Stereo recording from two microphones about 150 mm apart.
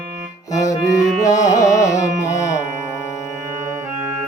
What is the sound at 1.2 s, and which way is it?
Music, 20° left (ahead or behind).